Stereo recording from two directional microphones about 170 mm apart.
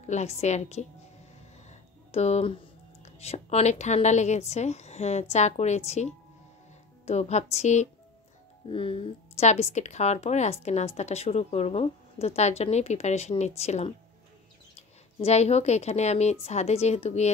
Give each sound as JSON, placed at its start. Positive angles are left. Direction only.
{"t": 0.0, "sound": "speech", "side_deg": 40}
{"t": 1.7, "sound": "a sound", "side_deg": 40}
{"t": 3.0, "sound": "a woman's voice", "side_deg": 40}
{"t": 7.1, "sound": "speech", "side_deg": 40}
{"t": 15.1, "sound": "speech", "side_deg": 40}